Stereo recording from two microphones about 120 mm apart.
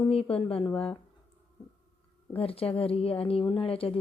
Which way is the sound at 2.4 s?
55° left (ahead or behind).